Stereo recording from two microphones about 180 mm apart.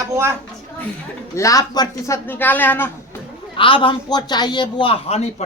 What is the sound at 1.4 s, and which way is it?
Speech, 20° left (ahead or behind).